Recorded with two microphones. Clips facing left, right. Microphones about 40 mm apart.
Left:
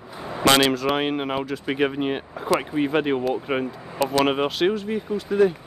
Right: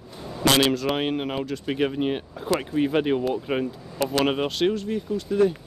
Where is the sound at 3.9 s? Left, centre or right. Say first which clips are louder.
Left 3 dB; left.